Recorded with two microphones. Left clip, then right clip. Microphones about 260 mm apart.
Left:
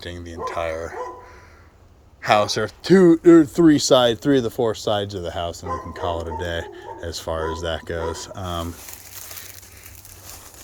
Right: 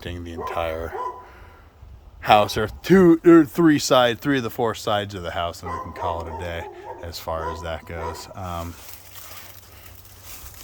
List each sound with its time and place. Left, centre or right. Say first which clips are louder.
0.0 s speech: left 1 dB; centre
2.2 s speech: right 1 dB; centre